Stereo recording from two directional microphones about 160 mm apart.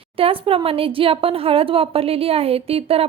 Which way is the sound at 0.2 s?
35° right (ahead or behind).